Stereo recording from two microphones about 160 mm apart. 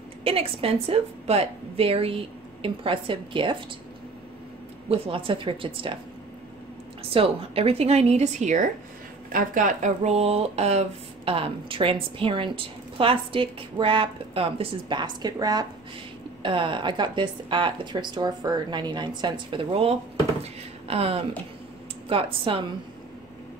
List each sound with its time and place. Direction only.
0.2 s speech: 35° right (ahead or behind)
4.8 s speech: 35° right (ahead or behind)
7.0 s a woman's voice: 35° right (ahead or behind)